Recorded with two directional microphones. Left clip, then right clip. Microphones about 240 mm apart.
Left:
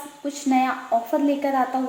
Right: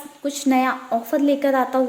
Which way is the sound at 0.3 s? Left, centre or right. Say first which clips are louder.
Right 2 dB; right.